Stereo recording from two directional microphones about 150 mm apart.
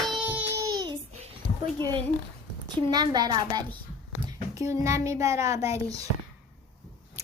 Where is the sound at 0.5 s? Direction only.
25° right (ahead or behind).